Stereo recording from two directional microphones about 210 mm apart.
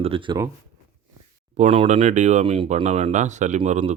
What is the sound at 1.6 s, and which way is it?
Speech, 30° right (ahead or behind).